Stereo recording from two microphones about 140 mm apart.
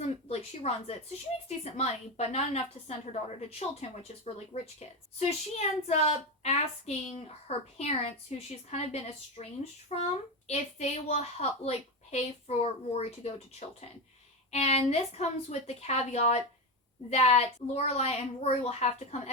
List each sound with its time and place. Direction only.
0.0 s a sound: 45° left (ahead or behind)
1.5 s a woman's voice: 50° left (ahead or behind)
4.4 s a woman's voice: 50° left (ahead or behind)